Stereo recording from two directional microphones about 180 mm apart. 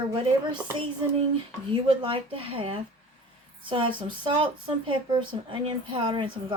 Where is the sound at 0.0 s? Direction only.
25° right (ahead or behind).